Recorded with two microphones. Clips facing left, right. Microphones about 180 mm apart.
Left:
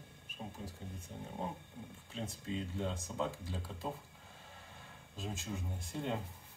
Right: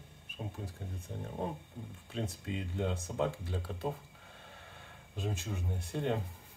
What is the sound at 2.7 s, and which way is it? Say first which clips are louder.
Speech: right 4 dB; 60° right (ahead or behind).